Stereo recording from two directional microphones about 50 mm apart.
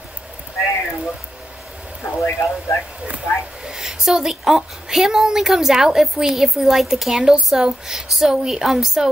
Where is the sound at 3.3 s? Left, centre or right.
Left.